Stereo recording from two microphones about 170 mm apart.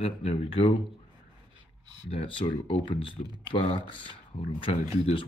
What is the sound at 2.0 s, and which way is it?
Speech, 30° left (ahead or behind).